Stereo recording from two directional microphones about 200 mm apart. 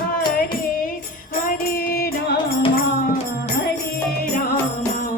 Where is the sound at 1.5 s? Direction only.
50° left (ahead or behind).